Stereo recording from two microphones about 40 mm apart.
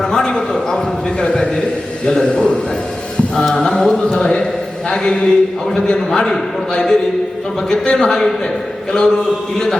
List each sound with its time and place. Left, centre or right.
0.0 s a sound: centre
1.2 s a man's voice: left
3.3 s mantra: centre
3.7 s a man's voice: centre